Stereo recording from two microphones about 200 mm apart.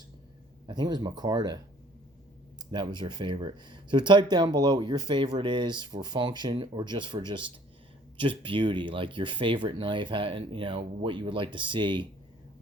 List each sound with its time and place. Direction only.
0.7 s speech: 20° right (ahead or behind)
2.6 s speech: 25° right (ahead or behind)